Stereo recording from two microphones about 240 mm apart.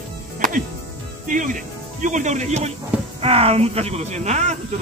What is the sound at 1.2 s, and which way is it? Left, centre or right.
Speech, right.